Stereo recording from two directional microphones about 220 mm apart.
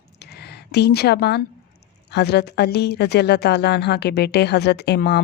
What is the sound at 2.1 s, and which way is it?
Speech, 50° left (ahead or behind).